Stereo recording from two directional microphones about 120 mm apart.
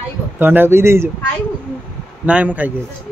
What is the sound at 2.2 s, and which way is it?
Speech, 10° right (ahead or behind).